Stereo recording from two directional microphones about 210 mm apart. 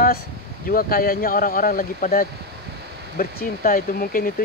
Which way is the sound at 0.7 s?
45° left (ahead or behind).